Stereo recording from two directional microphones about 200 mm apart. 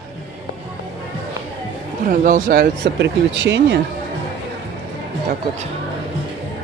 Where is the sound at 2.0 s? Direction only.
45° right (ahead or behind); by 3.8 s 60° right (ahead or behind).